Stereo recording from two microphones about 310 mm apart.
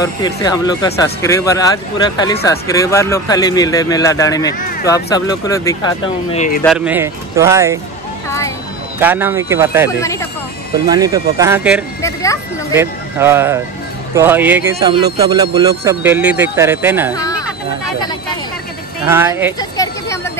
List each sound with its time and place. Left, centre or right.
0.0 s speech: centre
6.3 s speech: left
6.6 s speech: centre
9.0 s speech: centre
10.9 s speech: centre
12.0 s speech: centre
12.7 s speech: centre
19.0 s speech: centre